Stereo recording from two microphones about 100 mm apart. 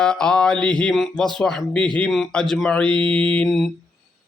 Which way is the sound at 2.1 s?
5° left (ahead or behind).